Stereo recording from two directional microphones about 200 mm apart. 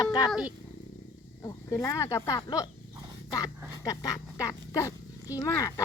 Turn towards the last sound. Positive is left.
turn(degrees=15)  # may be behind; listen again after turning